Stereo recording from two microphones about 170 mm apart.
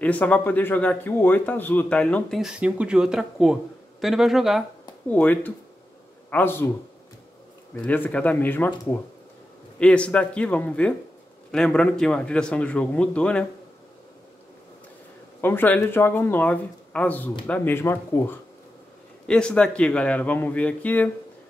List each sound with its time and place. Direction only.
0.0 s speech: 10° left (ahead or behind)
5.1 s speech: 10° left (ahead or behind)
7.8 s speech: 10° left (ahead or behind)
15.4 s speech: 10° left (ahead or behind)